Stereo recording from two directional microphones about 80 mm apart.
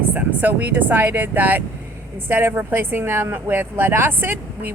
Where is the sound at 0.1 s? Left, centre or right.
Right.